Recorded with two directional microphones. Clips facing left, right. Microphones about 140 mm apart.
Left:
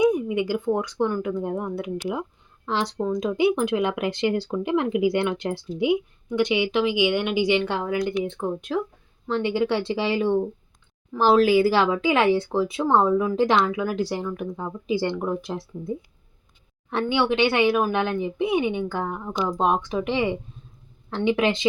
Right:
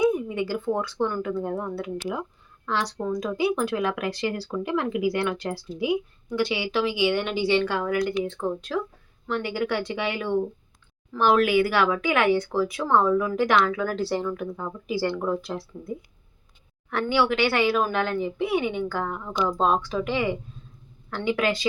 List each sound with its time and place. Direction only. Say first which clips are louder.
0.0 s speech: left 2 dB; 15° left (ahead or behind)
16.9 s speech: left 1 dB; 20° left (ahead or behind)